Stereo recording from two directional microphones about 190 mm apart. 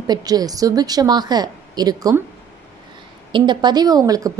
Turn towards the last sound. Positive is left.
turn(degrees=-20)  # may be behind; listen again after turning